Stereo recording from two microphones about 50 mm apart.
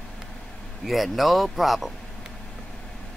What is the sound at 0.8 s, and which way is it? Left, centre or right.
Speech, centre.